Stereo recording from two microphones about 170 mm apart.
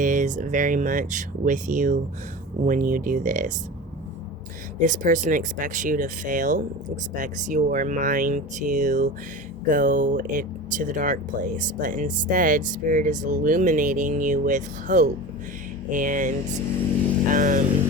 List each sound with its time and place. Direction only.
0.0 s speech: 50° right (ahead or behind)
4.8 s speech: 50° right (ahead or behind)
17.3 s speech: 50° right (ahead or behind)